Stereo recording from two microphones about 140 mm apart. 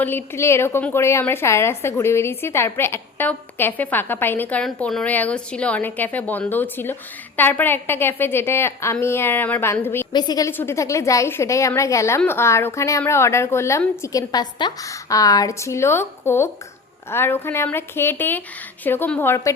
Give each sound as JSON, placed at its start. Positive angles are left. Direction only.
{"t": 0.0, "sound": "a woman's voice", "side_deg": 15}
{"t": 10.1, "sound": "a woman's voice", "side_deg": 30}